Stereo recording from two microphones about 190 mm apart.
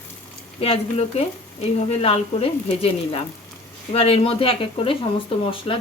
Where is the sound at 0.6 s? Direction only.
30° left (ahead or behind).